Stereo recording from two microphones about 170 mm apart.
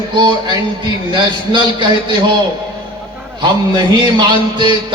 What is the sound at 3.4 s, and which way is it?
Speech, 25° right (ahead or behind).